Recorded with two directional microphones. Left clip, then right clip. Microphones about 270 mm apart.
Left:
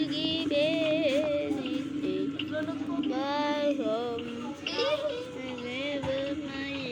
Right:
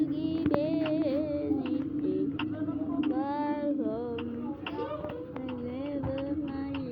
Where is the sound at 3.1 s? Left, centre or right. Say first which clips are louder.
Left 4 dB; centre.